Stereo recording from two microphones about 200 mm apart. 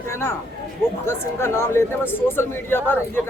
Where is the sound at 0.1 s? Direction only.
10° left (ahead or behind).